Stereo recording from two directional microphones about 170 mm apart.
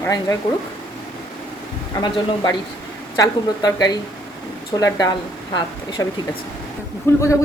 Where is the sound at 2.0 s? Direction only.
25° left (ahead or behind).